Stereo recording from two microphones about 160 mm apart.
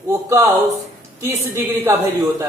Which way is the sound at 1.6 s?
15° right (ahead or behind).